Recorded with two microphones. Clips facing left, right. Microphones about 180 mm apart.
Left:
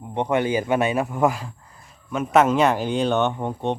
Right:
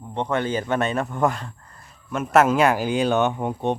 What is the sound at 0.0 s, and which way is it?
A man's voice, 15° left (ahead or behind).